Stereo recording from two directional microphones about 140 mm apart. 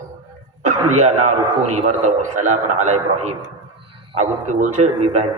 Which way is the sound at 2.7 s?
55° right (ahead or behind).